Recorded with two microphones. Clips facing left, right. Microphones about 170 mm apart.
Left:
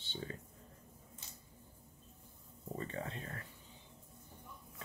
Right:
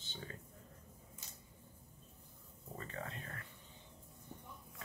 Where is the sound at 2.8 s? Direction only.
30° left (ahead or behind).